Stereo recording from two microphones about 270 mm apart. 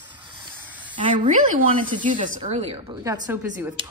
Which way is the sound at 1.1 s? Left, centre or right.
Right.